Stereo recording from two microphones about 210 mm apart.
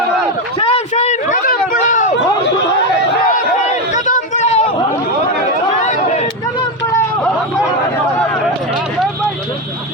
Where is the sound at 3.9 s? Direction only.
35° left (ahead or behind).